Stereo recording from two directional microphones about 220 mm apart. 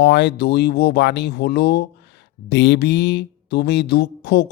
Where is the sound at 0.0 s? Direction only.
50° left (ahead or behind).